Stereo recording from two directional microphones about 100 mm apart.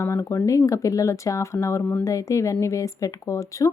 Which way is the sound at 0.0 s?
30° left (ahead or behind).